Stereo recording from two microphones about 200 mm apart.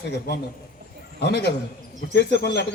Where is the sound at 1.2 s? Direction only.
60° right (ahead or behind).